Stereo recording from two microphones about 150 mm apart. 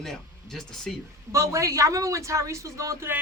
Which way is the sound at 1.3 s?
20° right (ahead or behind).